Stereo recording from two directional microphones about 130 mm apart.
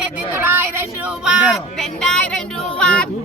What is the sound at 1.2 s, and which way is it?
Child singing, centre (ahead or behind).